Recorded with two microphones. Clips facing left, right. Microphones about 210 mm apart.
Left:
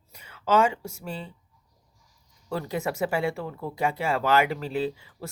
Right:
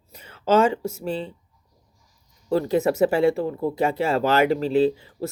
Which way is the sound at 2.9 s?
25° right (ahead or behind).